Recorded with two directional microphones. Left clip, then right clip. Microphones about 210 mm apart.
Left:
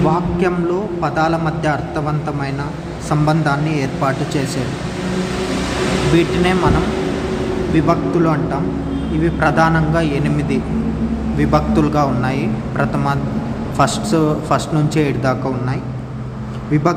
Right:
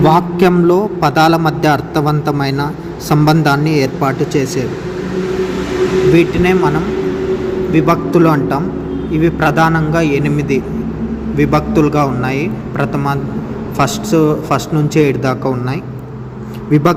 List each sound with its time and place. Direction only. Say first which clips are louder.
0.0 s a man's voice: right 6 dB; 30° right (ahead or behind)
6.1 s a man's voice: right 4 dB; 10° right (ahead or behind)
7.8 s a man's voice: right 5 dB; 25° right (ahead or behind)